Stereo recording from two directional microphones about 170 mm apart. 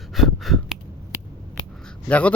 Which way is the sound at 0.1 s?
Centre (ahead or behind).